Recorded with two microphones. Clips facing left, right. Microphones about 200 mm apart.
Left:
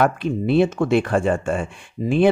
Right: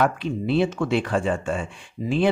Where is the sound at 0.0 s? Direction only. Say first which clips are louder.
Left 3 dB; 55° left (ahead or behind).